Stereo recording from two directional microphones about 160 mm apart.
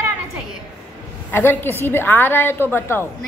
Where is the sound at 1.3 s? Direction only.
15° left (ahead or behind).